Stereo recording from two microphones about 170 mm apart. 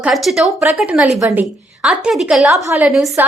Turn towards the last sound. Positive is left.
turn(degrees=0)  # may be behind; listen again after turning